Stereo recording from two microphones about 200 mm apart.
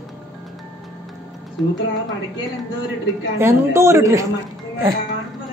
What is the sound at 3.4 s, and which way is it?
Speech, 15° right (ahead or behind).